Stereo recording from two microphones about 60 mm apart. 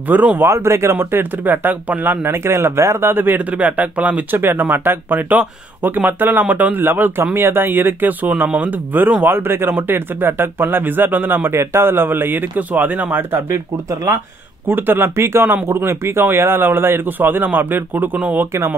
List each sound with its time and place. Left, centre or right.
0.1 s speech: right
0.4 s speech: right
0.9 s speech: right
2.2 s speech: right
4.4 s speech: right
14.7 s speech: right